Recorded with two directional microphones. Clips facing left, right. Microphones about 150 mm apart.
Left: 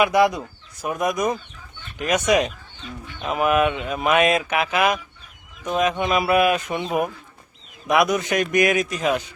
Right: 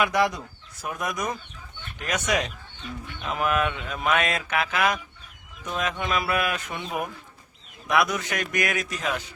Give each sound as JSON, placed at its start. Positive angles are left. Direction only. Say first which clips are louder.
{"t": 0.0, "sound": "speech", "louder": "left 6 dB", "side_deg": 10}
{"t": 7.9, "sound": "speech", "louder": "left 5 dB", "side_deg": 15}